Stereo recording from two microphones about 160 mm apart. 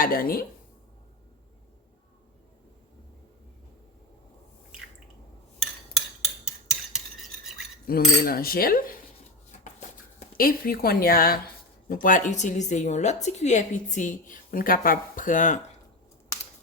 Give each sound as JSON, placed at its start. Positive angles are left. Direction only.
{"t": 0.0, "sound": "speech", "side_deg": 65}
{"t": 6.2, "sound": "cutlery", "side_deg": 0}
{"t": 7.9, "sound": "cutlery", "side_deg": 65}
{"t": 10.3, "sound": "cutlery", "side_deg": 65}
{"t": 11.9, "sound": "a woman's voice", "side_deg": 60}